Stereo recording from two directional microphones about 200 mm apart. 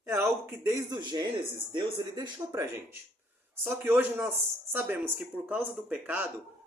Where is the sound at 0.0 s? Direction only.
15° right (ahead or behind).